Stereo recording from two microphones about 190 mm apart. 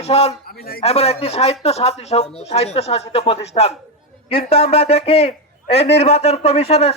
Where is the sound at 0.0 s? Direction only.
35° left (ahead or behind).